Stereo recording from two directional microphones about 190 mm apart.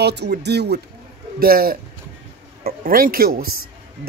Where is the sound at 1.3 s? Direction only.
50° right (ahead or behind).